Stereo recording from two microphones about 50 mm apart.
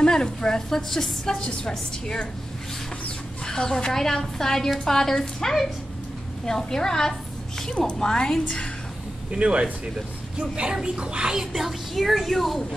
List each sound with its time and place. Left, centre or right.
0.0 s a woman's voice: centre
3.4 s a woman's voice: centre
9.3 s speech: right; by 12.6 s centre